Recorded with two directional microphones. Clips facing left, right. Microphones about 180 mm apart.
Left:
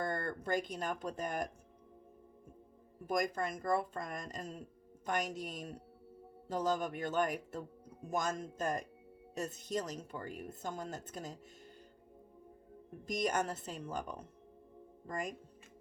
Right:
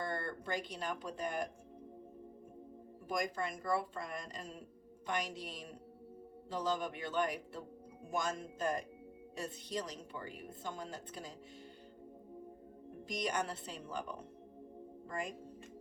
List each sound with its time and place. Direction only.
0.0 s speech: 45° left (ahead or behind)
3.1 s a woman's voice: 45° left (ahead or behind)
13.1 s a woman's voice: 45° left (ahead or behind)